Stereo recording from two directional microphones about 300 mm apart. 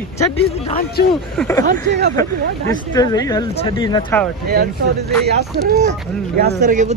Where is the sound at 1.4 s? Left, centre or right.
Centre.